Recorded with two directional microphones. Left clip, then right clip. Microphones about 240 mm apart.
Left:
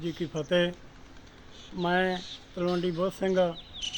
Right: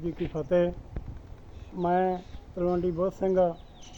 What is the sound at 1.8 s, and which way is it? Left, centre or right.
A man's voice, left.